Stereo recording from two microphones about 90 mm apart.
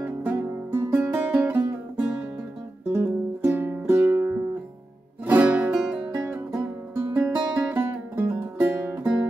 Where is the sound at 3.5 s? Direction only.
30° right (ahead or behind); by 6.1 s 10° right (ahead or behind).